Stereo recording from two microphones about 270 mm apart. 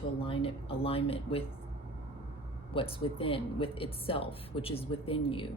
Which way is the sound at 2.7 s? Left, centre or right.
Centre.